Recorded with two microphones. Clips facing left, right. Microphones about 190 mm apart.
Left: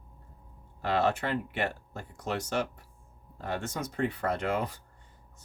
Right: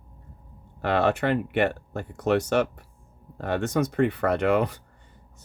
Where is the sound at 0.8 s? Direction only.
65° right (ahead or behind).